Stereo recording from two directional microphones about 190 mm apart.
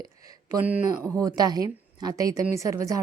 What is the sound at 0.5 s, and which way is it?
A woman's voice, 10° right (ahead or behind).